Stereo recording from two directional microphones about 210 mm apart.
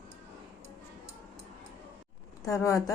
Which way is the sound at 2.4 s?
15° left (ahead or behind).